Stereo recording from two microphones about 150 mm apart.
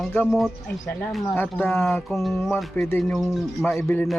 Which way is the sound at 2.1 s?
Centre (ahead or behind).